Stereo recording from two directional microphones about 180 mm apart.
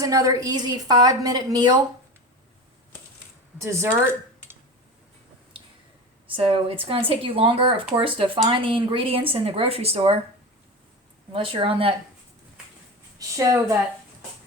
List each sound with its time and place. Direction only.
0.0 s a woman's voice: 20° right (ahead or behind)
3.6 s speech: 15° right (ahead or behind)
6.2 s speech: 30° right (ahead or behind)
11.3 s a woman's voice: 30° right (ahead or behind)
13.1 s a woman's voice: 20° right (ahead or behind)